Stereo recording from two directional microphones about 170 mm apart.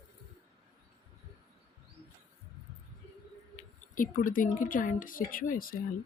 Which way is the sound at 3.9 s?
50° left (ahead or behind).